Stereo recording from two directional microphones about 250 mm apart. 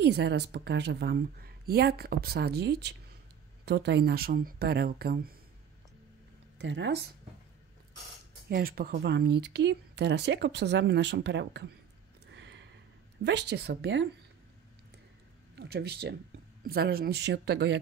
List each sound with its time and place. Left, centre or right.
0.0 s a woman's voice: right
6.6 s speech: right
8.5 s speech: right
12.4 s a sound: right
13.2 s speech: right
15.5 s a woman's voice: right